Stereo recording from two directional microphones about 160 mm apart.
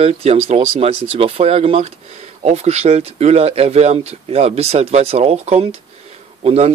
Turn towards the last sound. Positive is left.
turn(degrees=-40)  # may be behind; listen again after turning